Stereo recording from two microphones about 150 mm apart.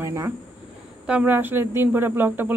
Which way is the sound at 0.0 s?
20° right (ahead or behind).